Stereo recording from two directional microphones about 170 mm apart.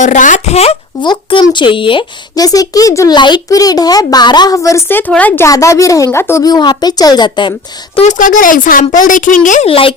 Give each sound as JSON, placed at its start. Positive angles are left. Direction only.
{"t": 0.0, "sound": "speech", "side_deg": 45}
{"t": 7.9, "sound": "speech", "side_deg": 45}
{"t": 9.6, "sound": "speech", "side_deg": 35}